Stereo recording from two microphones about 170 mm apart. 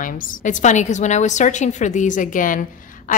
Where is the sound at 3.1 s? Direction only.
50° left (ahead or behind).